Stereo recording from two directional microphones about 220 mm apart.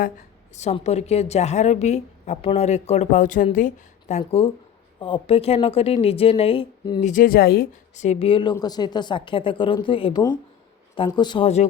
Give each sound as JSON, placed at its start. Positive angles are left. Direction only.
{"t": 0.5, "sound": "a woman's voice", "side_deg": 30}
{"t": 4.2, "sound": "a woman's voice", "side_deg": 25}
{"t": 7.0, "sound": "a woman's voice", "side_deg": 35}